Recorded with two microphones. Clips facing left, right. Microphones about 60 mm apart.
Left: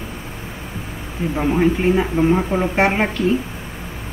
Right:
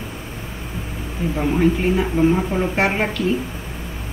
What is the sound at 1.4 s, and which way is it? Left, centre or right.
Speech, centre.